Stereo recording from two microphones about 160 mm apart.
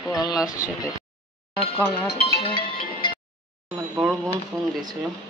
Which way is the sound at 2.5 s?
65° left (ahead or behind).